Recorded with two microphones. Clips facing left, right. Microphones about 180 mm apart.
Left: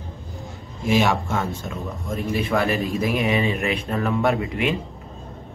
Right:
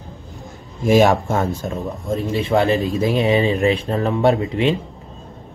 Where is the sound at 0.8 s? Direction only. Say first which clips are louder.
Right 6 dB; 45° right (ahead or behind).